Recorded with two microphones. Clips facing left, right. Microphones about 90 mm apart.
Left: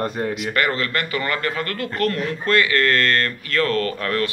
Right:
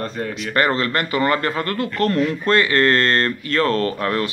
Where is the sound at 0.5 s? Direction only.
30° right (ahead or behind).